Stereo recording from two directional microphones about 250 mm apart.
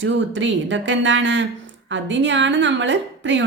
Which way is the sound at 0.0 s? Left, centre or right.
Right.